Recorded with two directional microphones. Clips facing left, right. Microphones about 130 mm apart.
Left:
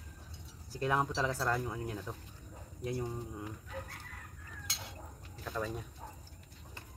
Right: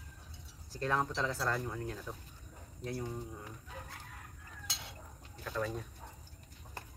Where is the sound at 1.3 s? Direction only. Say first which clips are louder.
Left 2 dB; centre (ahead or behind).